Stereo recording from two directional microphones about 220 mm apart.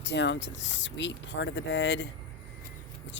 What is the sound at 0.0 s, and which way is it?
Speech, 50° left (ahead or behind).